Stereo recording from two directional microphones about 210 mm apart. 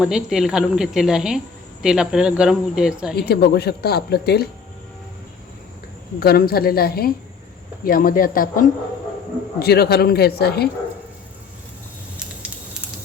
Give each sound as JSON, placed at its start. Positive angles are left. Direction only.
{"t": 0.0, "sound": "a woman's voice", "side_deg": -5}
{"t": 3.2, "sound": "speech", "side_deg": 50}
{"t": 6.1, "sound": "speech", "side_deg": 50}